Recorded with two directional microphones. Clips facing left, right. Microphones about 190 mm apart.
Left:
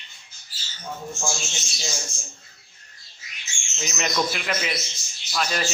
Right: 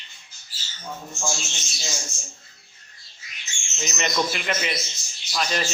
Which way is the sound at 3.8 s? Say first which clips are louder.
Even; centre (ahead or behind).